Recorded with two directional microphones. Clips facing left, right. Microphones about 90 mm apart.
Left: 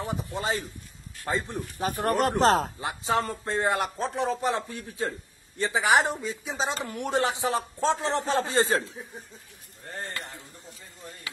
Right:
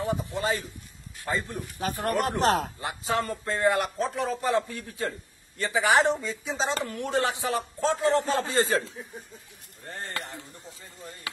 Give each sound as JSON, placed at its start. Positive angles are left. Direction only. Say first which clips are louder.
{"t": 0.3, "sound": "speech", "louder": "right 1 dB", "side_deg": 20}
{"t": 2.4, "sound": "speech", "louder": "left 3 dB", "side_deg": 35}
{"t": 2.8, "sound": "speech", "louder": "left 1 dB", "side_deg": 20}